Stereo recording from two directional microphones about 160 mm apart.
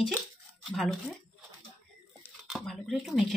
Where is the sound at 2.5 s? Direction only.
Centre (ahead or behind).